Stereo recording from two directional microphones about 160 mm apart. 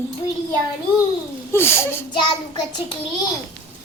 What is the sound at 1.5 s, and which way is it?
Speech, 15° left (ahead or behind).